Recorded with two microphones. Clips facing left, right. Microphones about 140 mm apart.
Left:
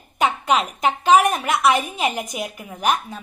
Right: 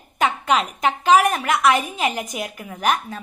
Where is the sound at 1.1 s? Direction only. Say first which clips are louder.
Even; 20° left (ahead or behind).